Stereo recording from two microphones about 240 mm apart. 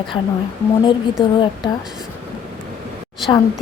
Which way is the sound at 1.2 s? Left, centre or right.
Centre.